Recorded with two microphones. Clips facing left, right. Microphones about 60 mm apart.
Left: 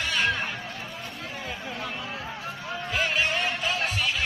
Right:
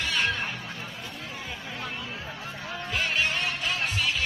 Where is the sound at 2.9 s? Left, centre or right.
Centre.